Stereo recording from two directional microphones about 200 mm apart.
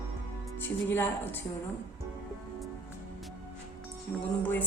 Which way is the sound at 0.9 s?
10° left (ahead or behind).